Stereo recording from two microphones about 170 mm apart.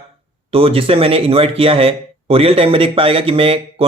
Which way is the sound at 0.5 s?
35° right (ahead or behind).